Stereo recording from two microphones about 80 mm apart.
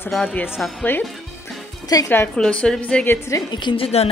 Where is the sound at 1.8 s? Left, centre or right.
Left.